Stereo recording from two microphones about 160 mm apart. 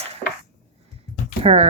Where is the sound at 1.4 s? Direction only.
40° right (ahead or behind).